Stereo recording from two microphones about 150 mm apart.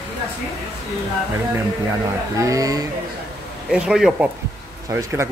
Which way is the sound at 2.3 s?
20° right (ahead or behind).